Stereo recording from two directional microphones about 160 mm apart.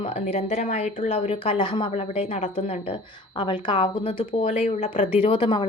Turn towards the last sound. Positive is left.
turn(degrees=30)  # may be behind; listen again after turning